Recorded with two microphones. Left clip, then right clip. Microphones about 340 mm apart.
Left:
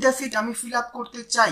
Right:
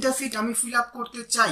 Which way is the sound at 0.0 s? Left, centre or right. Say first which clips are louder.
Left 4 dB; centre.